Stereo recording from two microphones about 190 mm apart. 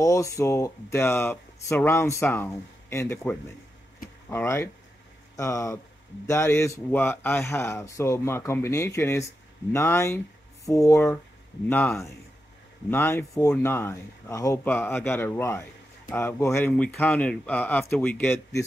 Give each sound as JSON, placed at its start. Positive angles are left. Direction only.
{"t": 0.0, "sound": "speech", "side_deg": 15}